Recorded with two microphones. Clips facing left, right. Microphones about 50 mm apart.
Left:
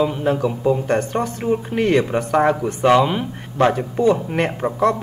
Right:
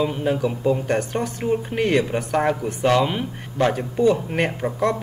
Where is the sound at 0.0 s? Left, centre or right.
Centre.